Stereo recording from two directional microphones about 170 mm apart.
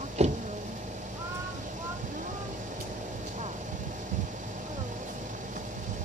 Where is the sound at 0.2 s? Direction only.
40° right (ahead or behind).